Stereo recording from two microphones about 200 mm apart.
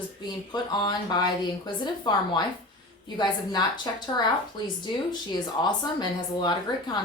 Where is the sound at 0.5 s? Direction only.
20° left (ahead or behind).